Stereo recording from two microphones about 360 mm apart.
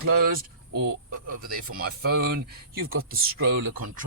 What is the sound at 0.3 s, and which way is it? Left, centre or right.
Speech, right.